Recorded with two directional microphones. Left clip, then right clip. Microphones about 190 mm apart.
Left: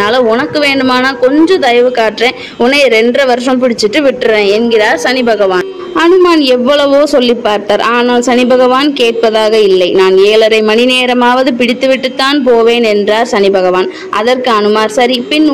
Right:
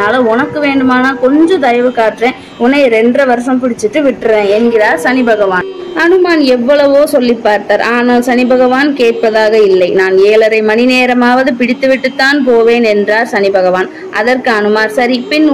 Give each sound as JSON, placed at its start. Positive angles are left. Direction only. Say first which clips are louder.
{"t": 0.0, "sound": "a woman's voice", "louder": "left 1 dB", "side_deg": 45}